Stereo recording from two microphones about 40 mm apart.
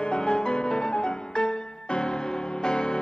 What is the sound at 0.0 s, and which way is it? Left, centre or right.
Music, left.